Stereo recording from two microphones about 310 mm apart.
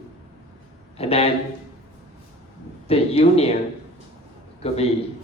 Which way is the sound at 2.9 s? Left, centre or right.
Centre.